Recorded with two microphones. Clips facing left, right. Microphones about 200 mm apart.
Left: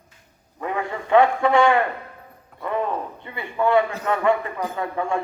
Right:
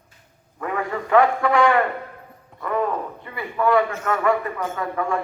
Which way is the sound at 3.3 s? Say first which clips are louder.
Even; 25° left (ahead or behind).